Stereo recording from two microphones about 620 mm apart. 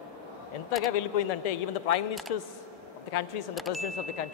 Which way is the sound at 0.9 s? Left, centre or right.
Left.